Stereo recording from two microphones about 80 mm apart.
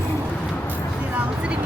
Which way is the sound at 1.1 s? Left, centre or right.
Centre.